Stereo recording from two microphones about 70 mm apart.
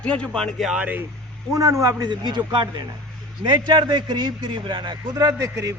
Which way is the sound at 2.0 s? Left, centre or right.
Right.